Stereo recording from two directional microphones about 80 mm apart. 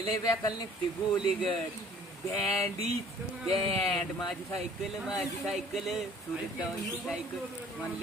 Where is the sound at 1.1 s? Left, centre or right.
Left.